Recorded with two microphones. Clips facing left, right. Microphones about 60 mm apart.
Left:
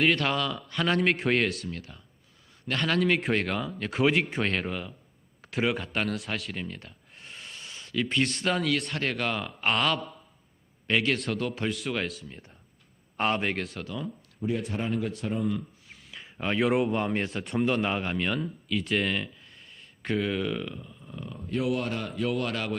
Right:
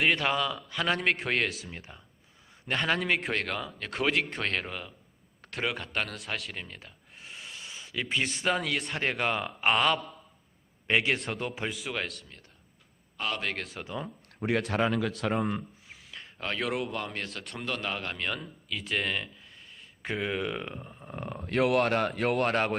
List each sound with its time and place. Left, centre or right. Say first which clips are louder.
0.0 s a man's voice: left 1 dB; centre
1.7 s a man's voice: left 4 dB; centre
10.8 s a man's voice: left 1 dB; centre
13.1 s a man's voice: left 6 dB; left
13.4 s a man's voice: left 4 dB; centre
13.8 s speech: left 1 dB; right
14.3 s speech: right 3 dB; right
15.9 s a sound: even; centre
16.4 s speech: left 7 dB; centre
16.9 s speech: left 7 dB; left
17.4 s a man's voice: left 12 dB; centre
17.7 s a man's voice: left 2 dB; centre
20.0 s speech: left 3 dB; centre
20.7 s speech: even; right